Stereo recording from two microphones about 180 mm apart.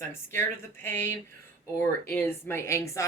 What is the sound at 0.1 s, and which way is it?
A woman's voice, 15° left (ahead or behind).